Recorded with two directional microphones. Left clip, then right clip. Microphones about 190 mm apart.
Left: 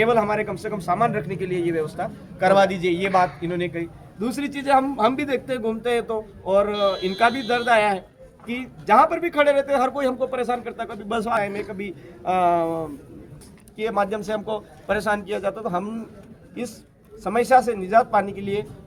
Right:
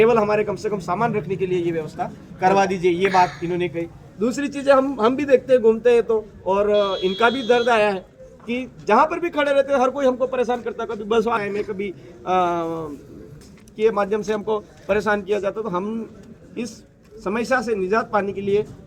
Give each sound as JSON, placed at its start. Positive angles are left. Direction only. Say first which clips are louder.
{"t": 0.0, "sound": "speech", "louder": "right 3 dB", "side_deg": 10}
{"t": 6.7, "sound": "speech", "louder": "right 3 dB", "side_deg": 0}
{"t": 7.7, "sound": "speech", "louder": "even", "side_deg": 10}
{"t": 17.2, "sound": "speech", "louder": "left 4 dB", "side_deg": 15}